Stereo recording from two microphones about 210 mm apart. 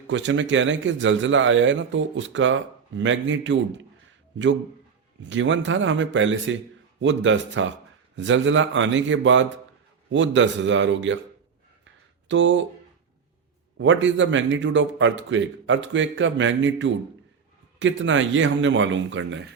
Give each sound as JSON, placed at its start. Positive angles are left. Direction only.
{"t": 0.1, "sound": "a man's voice", "side_deg": -65}
{"t": 5.3, "sound": "a man's voice", "side_deg": -60}
{"t": 12.3, "sound": "a man's voice", "side_deg": -60}
{"t": 13.7, "sound": "a man's voice", "side_deg": -60}